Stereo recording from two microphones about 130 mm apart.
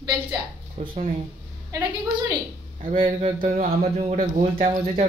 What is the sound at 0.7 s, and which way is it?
Speech, 55° right (ahead or behind).